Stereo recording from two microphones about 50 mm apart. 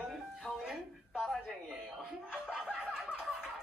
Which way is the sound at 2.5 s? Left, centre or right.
Centre.